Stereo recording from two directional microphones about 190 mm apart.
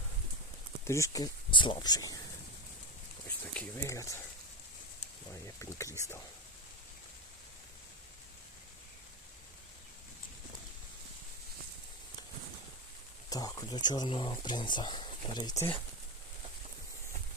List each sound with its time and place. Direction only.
0.9 s speech: 15° left (ahead or behind)
3.5 s speech: 15° left (ahead or behind)
5.5 s speech: 15° left (ahead or behind)
13.3 s speech: 20° left (ahead or behind)